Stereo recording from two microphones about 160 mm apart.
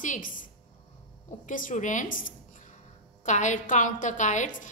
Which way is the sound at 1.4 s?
55° left (ahead or behind).